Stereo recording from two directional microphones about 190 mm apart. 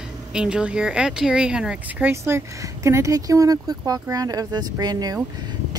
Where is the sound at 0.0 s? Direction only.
5° right (ahead or behind).